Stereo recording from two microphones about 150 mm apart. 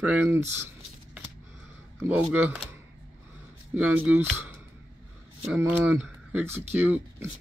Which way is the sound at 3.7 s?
10° right (ahead or behind).